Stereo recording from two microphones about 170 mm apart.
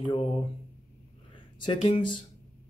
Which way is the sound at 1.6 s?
30° left (ahead or behind).